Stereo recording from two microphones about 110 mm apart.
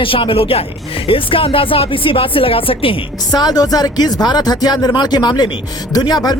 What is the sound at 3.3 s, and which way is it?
Speech, 35° left (ahead or behind).